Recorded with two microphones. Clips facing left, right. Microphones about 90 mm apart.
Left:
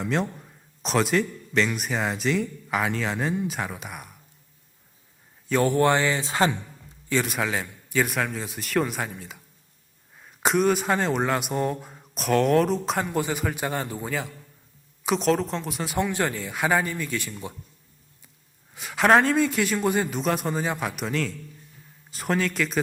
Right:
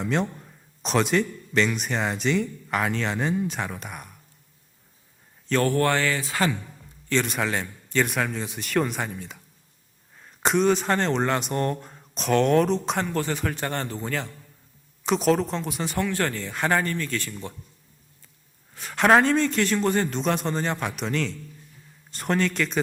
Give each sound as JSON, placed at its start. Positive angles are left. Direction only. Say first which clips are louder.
{"t": 0.0, "sound": "speech", "louder": "right 1 dB", "side_deg": 0}
{"t": 5.5, "sound": "speech", "louder": "left 1 dB", "side_deg": 15}
{"t": 7.1, "sound": "speech", "louder": "even", "side_deg": 5}
{"t": 16.0, "sound": "speech", "louder": "left 1 dB", "side_deg": 15}
{"t": 18.7, "sound": "speech", "louder": "even", "side_deg": 5}